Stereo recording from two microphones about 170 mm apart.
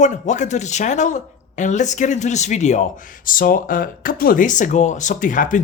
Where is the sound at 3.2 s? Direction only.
55° left (ahead or behind).